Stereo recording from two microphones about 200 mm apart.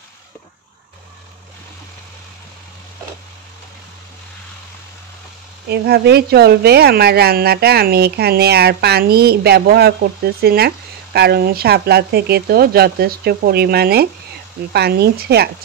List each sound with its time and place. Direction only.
5.7 s speech: 55° right (ahead or behind)